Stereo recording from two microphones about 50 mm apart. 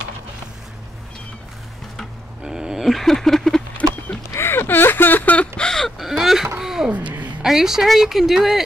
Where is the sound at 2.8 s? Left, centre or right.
Centre.